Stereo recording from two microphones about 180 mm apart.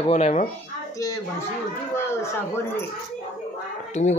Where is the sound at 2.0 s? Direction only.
15° left (ahead or behind).